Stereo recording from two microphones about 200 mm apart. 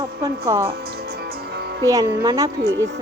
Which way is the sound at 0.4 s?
15° right (ahead or behind).